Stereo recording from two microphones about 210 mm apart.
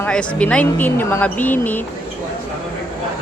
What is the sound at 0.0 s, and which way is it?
A woman's voice, 5° left (ahead or behind).